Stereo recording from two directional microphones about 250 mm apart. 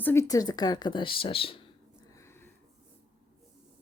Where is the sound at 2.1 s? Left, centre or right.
Centre.